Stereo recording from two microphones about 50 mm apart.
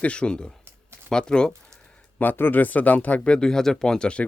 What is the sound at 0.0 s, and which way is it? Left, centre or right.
Speech, left.